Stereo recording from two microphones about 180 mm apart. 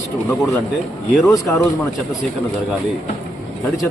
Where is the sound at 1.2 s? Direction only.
15° left (ahead or behind).